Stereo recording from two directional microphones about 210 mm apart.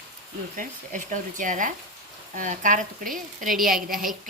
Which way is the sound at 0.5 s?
40° right (ahead or behind).